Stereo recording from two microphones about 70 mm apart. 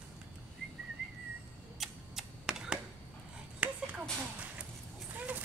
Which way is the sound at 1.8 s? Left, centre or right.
Centre.